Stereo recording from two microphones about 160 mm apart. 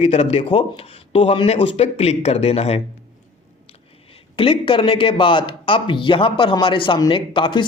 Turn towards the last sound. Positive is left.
turn(degrees=30)  # may be behind; listen again after turning